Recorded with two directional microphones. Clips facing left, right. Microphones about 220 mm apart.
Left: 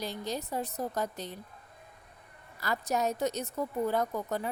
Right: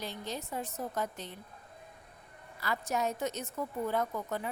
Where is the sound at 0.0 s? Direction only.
40° left (ahead or behind).